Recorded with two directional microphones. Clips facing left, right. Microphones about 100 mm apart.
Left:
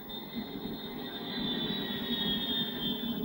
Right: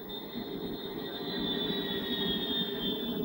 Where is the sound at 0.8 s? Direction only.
15° right (ahead or behind).